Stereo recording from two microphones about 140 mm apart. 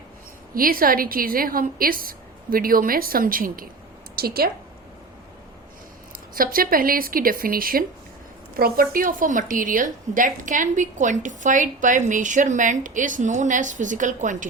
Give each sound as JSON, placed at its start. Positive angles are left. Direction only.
{"t": 0.5, "sound": "a woman's voice", "side_deg": -90}
{"t": 6.3, "sound": "a woman's voice", "side_deg": -90}